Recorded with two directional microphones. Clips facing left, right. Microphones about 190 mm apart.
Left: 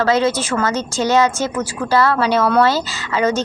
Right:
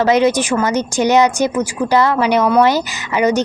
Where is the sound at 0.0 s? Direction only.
15° right (ahead or behind).